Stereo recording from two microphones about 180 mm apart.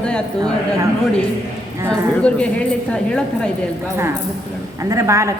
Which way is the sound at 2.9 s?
5° left (ahead or behind).